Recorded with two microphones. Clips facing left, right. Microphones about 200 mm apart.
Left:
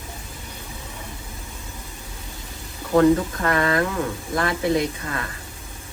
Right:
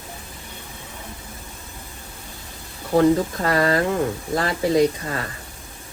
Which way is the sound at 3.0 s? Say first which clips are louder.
Even; 30° right (ahead or behind).